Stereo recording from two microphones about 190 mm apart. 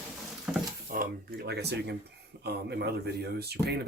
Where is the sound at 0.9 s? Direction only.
45° right (ahead or behind).